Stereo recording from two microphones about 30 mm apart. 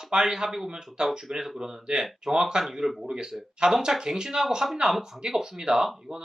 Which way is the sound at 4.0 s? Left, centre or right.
Centre.